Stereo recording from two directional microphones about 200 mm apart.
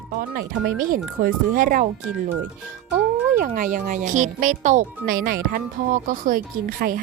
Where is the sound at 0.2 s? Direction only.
45° right (ahead or behind).